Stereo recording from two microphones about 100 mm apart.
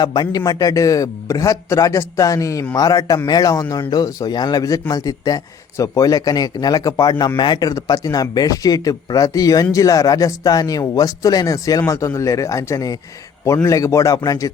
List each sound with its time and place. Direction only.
0.0 s a man's voice: 45° left (ahead or behind)